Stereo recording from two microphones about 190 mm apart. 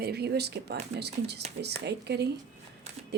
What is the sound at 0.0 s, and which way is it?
Speech, 60° right (ahead or behind).